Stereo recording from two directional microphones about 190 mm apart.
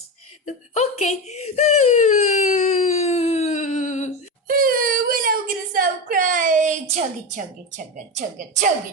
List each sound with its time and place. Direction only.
0.4 s whimper: 35° left (ahead or behind)
4.4 s whimper: 50° right (ahead or behind)
6.9 s a sound: 40° right (ahead or behind)
8.1 s a woman's voice: 40° right (ahead or behind)